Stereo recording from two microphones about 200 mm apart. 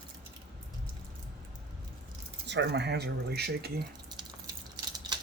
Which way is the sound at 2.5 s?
60° right (ahead or behind).